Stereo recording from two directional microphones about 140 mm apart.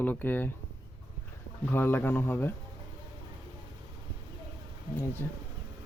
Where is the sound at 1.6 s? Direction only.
15° left (ahead or behind).